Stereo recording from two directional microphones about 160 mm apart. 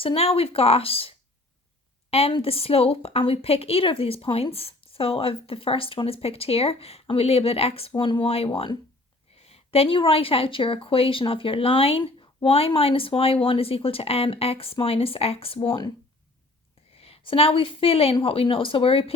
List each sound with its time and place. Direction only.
0.0 s a woman's voice: 35° left (ahead or behind)
16.9 s a woman's voice: 35° left (ahead or behind)